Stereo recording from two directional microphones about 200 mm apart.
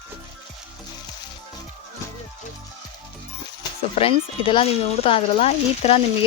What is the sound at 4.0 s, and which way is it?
Speech, 25° left (ahead or behind).